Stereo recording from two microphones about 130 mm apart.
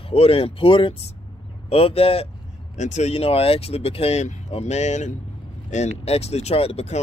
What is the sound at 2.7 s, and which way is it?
Speech, 65° left (ahead or behind).